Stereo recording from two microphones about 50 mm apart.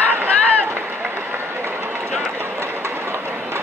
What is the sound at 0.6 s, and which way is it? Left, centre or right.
Run, right.